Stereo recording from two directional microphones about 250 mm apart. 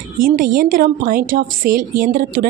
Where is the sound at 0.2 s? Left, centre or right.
Right.